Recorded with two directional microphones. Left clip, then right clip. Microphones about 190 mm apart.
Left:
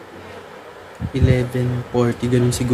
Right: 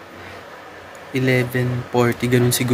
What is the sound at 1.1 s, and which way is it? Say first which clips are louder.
Speech: right 2 dB; 5° left (ahead or behind).